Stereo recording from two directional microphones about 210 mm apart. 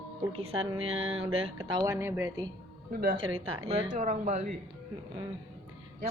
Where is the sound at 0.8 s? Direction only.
70° right (ahead or behind).